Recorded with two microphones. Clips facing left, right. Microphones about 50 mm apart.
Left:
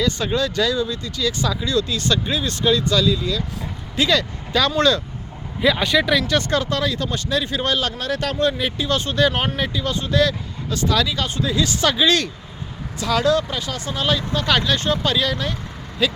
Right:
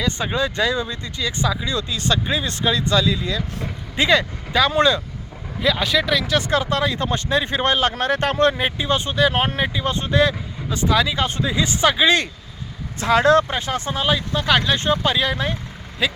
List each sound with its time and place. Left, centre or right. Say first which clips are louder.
0.0 s speech: left 1 dB; centre
5.6 s speech: left 2 dB; centre; by 8.6 s right
8.6 s speech: right 1 dB; right
9.6 s speech: right 1 dB; right
13.0 s speech: right 4 dB; right
13.9 s speech: left 1 dB; centre